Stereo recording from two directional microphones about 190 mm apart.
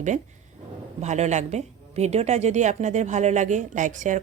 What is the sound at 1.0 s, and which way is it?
A woman's voice, 35° right (ahead or behind).